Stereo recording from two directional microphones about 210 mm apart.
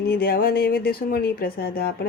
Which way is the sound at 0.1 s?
45° left (ahead or behind).